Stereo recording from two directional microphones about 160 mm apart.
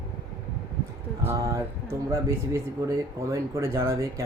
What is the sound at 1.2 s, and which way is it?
A man's voice, 20° right (ahead or behind).